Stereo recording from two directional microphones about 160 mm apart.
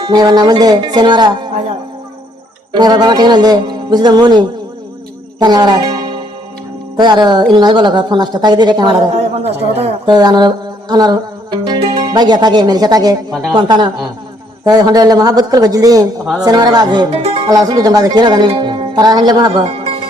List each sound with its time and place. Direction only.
0.0 s speech: 25° right (ahead or behind)
2.7 s speech: 25° right (ahead or behind)
9.3 s speech: 40° right (ahead or behind)
10.1 s music: 25° right (ahead or behind)
13.5 s speech: 30° right (ahead or behind)